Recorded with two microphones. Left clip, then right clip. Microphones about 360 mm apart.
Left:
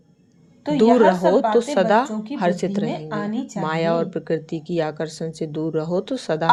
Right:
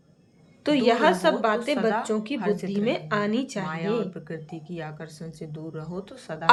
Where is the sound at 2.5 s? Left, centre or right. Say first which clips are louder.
Left 4 dB; centre.